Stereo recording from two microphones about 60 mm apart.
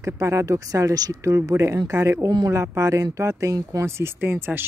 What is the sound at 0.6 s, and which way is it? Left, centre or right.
Speech, right.